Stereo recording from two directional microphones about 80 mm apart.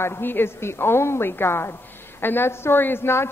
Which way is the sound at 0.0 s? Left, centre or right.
Left.